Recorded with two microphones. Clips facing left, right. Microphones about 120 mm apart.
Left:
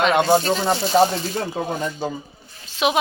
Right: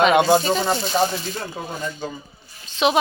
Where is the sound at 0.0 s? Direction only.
10° right (ahead or behind).